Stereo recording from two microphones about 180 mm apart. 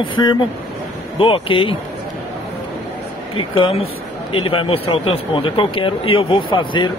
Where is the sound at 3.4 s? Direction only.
30° left (ahead or behind).